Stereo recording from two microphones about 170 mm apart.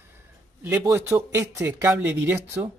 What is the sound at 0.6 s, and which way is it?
Speech, 15° right (ahead or behind).